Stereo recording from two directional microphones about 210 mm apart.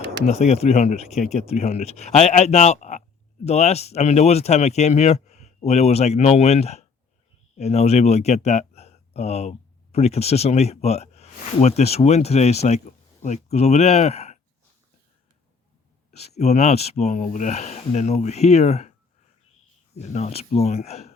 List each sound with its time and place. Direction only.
0.3 s speech: 30° left (ahead or behind)
16.3 s speech: 30° left (ahead or behind)
20.0 s speech: 30° left (ahead or behind)